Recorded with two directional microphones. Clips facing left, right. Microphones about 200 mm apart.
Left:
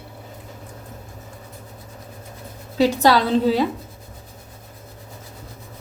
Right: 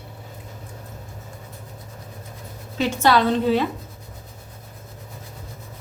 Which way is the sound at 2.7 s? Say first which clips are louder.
Left 3 dB; 35° left (ahead or behind).